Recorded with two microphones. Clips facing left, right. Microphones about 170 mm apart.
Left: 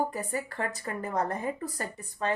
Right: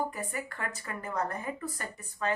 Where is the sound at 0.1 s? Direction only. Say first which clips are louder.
Left 4 dB; 35° left (ahead or behind).